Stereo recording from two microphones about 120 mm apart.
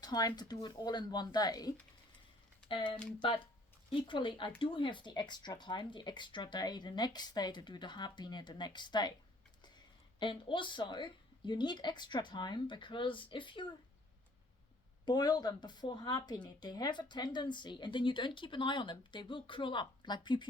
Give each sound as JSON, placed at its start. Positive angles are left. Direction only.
{"t": 0.0, "sound": "a woman's voice", "side_deg": 30}
{"t": 2.6, "sound": "a woman's voice", "side_deg": 45}
{"t": 10.2, "sound": "a woman's voice", "side_deg": 45}
{"t": 15.0, "sound": "a woman's voice", "side_deg": 35}